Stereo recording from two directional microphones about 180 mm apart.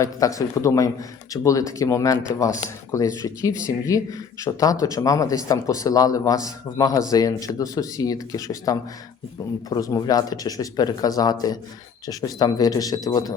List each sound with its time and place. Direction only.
0.0 s speech: 20° left (ahead or behind)